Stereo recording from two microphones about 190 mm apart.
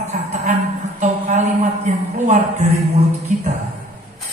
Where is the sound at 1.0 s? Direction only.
40° right (ahead or behind).